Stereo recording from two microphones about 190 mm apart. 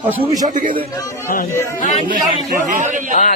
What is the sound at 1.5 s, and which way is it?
Speech, 15° left (ahead or behind).